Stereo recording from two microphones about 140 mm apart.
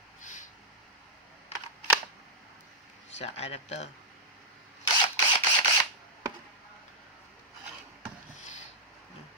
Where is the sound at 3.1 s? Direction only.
50° left (ahead or behind).